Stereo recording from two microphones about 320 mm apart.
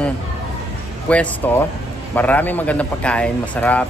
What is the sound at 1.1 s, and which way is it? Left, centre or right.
A man's voice, centre.